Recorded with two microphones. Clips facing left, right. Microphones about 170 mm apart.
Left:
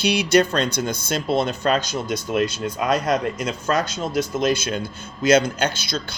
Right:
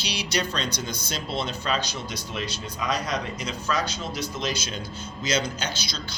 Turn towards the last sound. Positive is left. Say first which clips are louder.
# left 6 dB
turn(degrees=55)  # may be behind; listen again after turning